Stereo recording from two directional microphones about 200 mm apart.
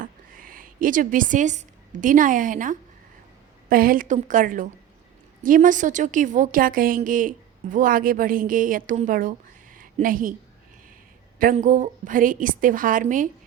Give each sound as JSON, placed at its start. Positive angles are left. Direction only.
{"t": 0.0, "sound": "a woman's voice", "side_deg": -45}
{"t": 9.7, "sound": "a sound", "side_deg": -45}
{"t": 11.3, "sound": "a woman's voice", "side_deg": -40}